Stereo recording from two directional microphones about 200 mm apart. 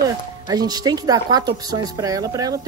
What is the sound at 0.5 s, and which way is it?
A woman's voice, 20° right (ahead or behind).